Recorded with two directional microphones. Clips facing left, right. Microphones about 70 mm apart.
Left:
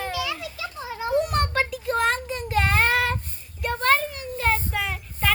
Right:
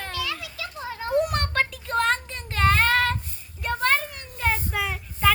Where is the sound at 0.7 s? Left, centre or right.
Centre.